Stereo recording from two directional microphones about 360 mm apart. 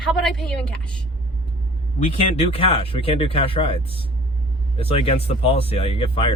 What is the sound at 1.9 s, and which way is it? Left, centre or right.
Speech, centre.